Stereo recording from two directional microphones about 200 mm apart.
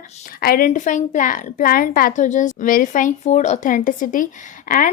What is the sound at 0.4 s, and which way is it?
A woman's voice, 45° left (ahead or behind).